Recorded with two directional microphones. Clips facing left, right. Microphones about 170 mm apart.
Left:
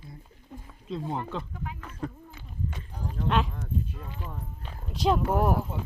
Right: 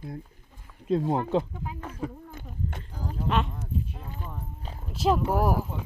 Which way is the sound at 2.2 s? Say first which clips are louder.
Right 1 dB; 50° right (ahead or behind).